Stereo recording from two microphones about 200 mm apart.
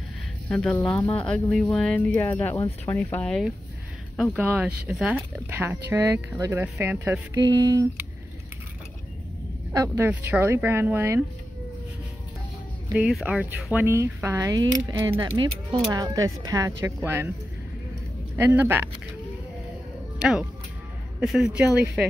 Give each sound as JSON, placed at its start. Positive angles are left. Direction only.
{"t": 0.5, "sound": "speech", "side_deg": 5}
{"t": 4.4, "sound": "speech", "side_deg": -10}
{"t": 9.7, "sound": "speech", "side_deg": -10}
{"t": 12.9, "sound": "speech", "side_deg": -5}
{"t": 18.4, "sound": "speech", "side_deg": -10}
{"t": 20.2, "sound": "speech", "side_deg": -5}